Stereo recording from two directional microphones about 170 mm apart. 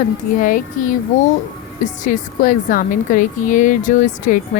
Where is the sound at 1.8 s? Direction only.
50° left (ahead or behind).